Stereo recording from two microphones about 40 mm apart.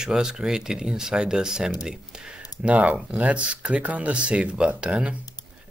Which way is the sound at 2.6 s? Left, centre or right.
Right.